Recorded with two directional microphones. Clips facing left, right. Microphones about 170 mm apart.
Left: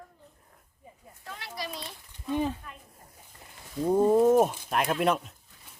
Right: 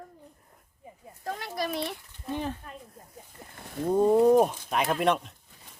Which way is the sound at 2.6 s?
35° right (ahead or behind).